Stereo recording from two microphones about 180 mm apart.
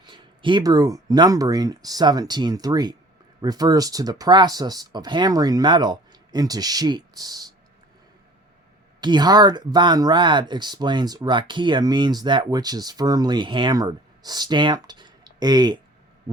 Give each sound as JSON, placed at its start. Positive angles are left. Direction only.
{"t": 0.0, "sound": "speech", "side_deg": -25}
{"t": 9.0, "sound": "speech", "side_deg": -25}